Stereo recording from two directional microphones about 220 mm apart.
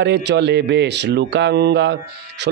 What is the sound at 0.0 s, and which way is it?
Speech, 50° right (ahead or behind).